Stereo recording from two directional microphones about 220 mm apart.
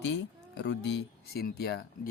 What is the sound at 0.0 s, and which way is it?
Speech, 55° left (ahead or behind).